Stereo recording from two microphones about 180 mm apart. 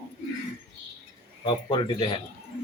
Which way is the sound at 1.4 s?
30° left (ahead or behind).